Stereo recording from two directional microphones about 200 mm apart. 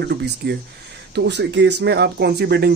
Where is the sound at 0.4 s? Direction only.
55° right (ahead or behind).